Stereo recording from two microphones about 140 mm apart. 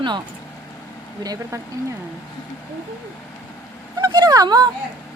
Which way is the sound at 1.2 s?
25° right (ahead or behind).